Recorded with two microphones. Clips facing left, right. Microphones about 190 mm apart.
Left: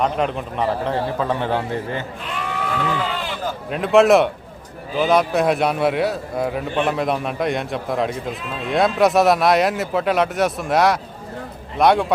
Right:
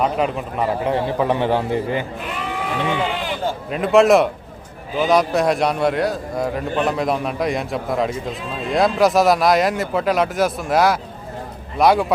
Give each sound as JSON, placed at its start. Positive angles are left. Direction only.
{"t": 0.0, "sound": "a man's voice", "side_deg": -5}
{"t": 3.7, "sound": "a man's voice", "side_deg": 0}